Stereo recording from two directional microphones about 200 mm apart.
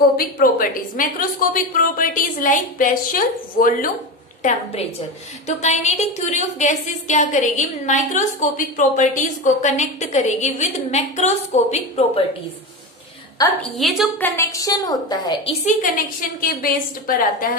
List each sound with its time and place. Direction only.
0.4 s a woman's voice: 45° left (ahead or behind)
13.6 s a woman's voice: centre (ahead or behind); by 15.5 s 20° left (ahead or behind)
15.6 s a woman's voice: 45° left (ahead or behind)